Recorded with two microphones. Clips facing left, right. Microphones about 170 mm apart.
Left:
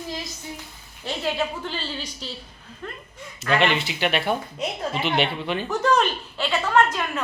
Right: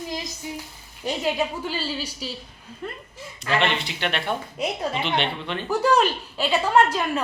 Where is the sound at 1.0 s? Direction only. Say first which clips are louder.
Right 2 dB; 15° right (ahead or behind).